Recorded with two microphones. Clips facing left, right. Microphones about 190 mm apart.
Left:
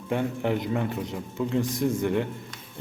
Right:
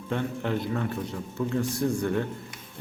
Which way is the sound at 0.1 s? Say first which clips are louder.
Left 3 dB; 15° left (ahead or behind).